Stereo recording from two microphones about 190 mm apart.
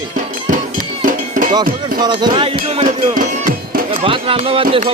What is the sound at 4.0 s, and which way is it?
Speech, 30° right (ahead or behind).